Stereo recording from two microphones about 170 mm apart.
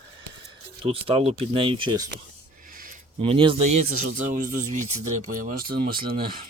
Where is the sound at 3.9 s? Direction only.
50° right (ahead or behind).